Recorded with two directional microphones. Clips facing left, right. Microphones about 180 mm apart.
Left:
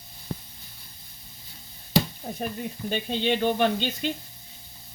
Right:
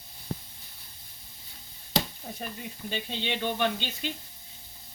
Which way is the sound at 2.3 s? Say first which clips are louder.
Left 7 dB; 45° left (ahead or behind).